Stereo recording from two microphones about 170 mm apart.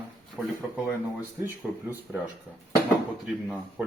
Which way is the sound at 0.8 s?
10° right (ahead or behind).